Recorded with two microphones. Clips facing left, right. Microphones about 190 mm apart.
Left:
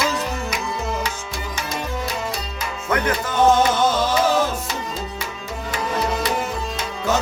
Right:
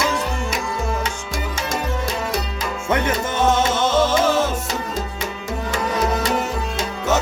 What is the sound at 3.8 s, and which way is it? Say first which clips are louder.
Music: right 2 dB; 25° right (ahead or behind).